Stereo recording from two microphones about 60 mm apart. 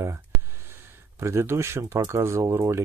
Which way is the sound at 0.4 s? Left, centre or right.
Right.